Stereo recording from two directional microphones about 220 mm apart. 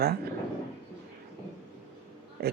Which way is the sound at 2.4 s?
45° right (ahead or behind).